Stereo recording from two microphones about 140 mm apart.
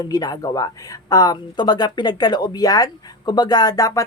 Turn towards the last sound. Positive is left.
turn(degrees=25)  # may be behind; listen again after turning